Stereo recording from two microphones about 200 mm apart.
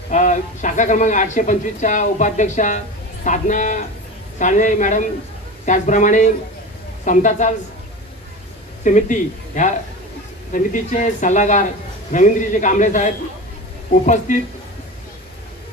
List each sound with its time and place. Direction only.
0.1 s speech: 40° left (ahead or behind)
8.8 s speech: 40° left (ahead or behind)
14.3 s speech: 40° left (ahead or behind)